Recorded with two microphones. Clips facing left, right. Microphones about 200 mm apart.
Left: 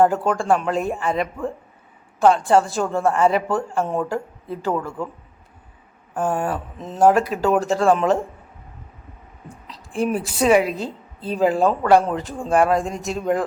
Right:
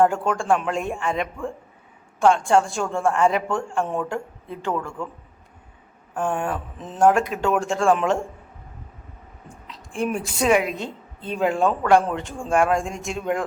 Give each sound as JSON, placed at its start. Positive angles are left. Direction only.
{"t": 0.0, "sound": "speech", "side_deg": 0}
{"t": 6.1, "sound": "speech", "side_deg": 5}
{"t": 9.6, "sound": "a sound", "side_deg": 0}
{"t": 10.1, "sound": "a woman's voice", "side_deg": 35}
{"t": 10.4, "sound": "speech", "side_deg": 0}